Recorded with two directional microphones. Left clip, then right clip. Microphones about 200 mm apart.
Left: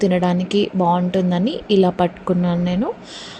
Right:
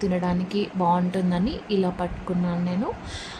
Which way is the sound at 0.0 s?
25° left (ahead or behind).